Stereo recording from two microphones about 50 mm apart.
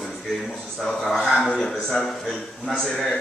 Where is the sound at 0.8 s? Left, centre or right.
Centre.